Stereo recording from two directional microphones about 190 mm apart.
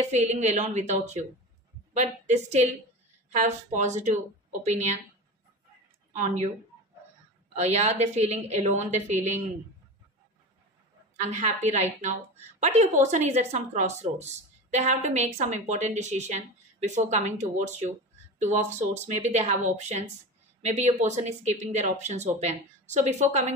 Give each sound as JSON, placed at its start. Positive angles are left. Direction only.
{"t": 0.1, "sound": "a woman's voice", "side_deg": -35}
{"t": 6.1, "sound": "a woman's voice", "side_deg": -40}
{"t": 7.5, "sound": "a woman's voice", "side_deg": -35}
{"t": 11.2, "sound": "a woman's voice", "side_deg": -35}